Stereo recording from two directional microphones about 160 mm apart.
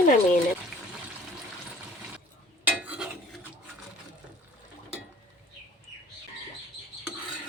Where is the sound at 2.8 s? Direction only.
10° right (ahead or behind).